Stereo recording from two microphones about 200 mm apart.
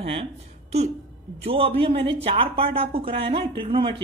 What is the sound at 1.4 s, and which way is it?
Speech, 30° right (ahead or behind).